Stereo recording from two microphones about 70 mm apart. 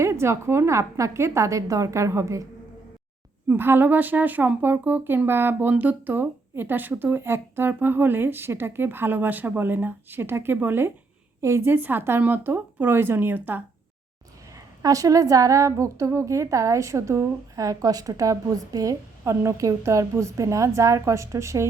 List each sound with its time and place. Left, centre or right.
0.0 s a woman's voice: right
3.5 s speech: right
11.3 s a woman's voice: right
14.8 s a woman's voice: right
19.2 s a woman's voice: right